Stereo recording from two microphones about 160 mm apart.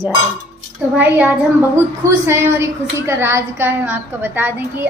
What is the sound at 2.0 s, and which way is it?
A woman's voice, 20° right (ahead or behind).